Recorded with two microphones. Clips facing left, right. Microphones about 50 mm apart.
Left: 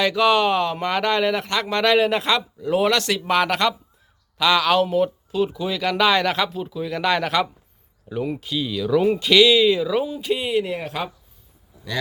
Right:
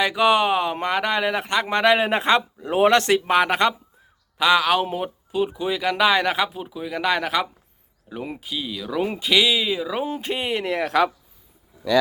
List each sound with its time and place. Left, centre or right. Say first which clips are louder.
0.0 s speech: left 1 dB; centre
10.1 s speech: left 2 dB; right